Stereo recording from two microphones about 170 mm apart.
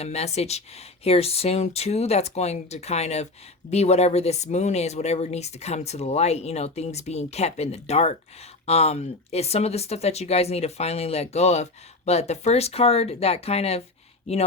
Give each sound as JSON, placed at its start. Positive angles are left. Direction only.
{"t": 0.0, "sound": "speech", "side_deg": 40}